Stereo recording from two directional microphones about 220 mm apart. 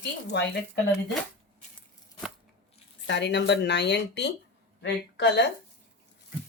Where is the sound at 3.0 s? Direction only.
55° left (ahead or behind).